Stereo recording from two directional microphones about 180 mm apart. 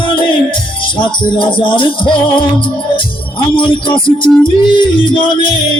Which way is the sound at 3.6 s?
30° left (ahead or behind).